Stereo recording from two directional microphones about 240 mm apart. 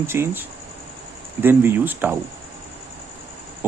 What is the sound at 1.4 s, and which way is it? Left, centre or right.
Speech, centre.